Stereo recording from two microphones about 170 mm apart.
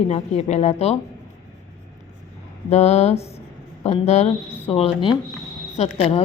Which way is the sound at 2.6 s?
40° left (ahead or behind).